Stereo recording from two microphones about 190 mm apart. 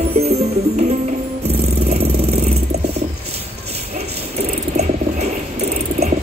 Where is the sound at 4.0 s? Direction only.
35° right (ahead or behind).